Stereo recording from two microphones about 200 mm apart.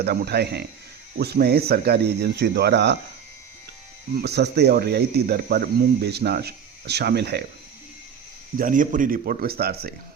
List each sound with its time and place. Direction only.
0.0 s speech: 55° right (ahead or behind)
4.2 s speech: 55° right (ahead or behind)
8.5 s speech: 40° right (ahead or behind)